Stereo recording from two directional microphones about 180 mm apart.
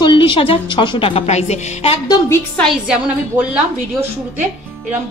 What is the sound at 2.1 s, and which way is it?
Speech, 15° left (ahead or behind).